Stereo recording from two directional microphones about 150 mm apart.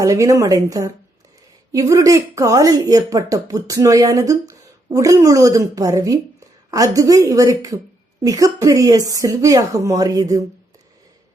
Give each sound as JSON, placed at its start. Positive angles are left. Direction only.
{"t": 0.0, "sound": "speech", "side_deg": -20}